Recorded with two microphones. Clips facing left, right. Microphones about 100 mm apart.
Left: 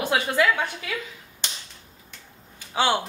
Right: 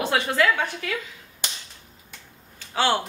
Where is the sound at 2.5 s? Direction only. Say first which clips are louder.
Even; 15° left (ahead or behind).